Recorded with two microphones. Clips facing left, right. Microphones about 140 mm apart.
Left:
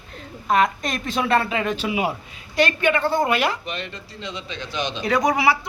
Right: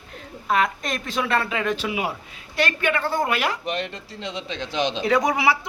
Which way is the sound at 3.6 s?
70° right (ahead or behind).